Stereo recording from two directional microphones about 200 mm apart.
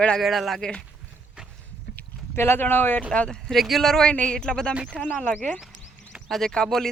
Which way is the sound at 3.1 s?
5° left (ahead or behind).